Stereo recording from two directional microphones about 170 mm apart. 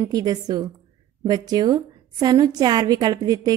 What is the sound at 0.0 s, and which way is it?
A woman's voice, 25° right (ahead or behind).